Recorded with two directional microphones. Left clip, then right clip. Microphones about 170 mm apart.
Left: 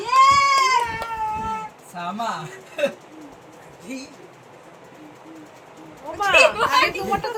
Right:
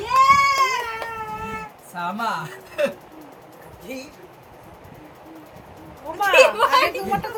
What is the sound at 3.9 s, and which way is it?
Speech, 55° right (ahead or behind).